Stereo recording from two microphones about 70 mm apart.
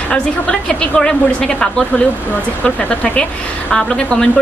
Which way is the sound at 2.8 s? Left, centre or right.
Centre.